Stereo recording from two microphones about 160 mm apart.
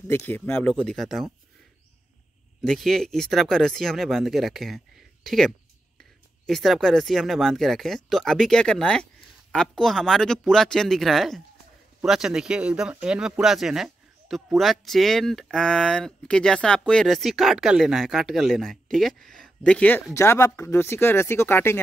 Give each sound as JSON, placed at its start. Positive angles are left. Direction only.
{"t": 0.3, "sound": "speech", "side_deg": 10}
{"t": 2.6, "sound": "speech", "side_deg": 5}
{"t": 20.2, "sound": "speech", "side_deg": 20}